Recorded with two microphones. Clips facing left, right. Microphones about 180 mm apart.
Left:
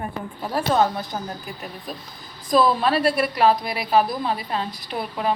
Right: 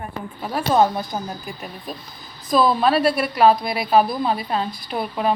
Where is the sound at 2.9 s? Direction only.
30° right (ahead or behind).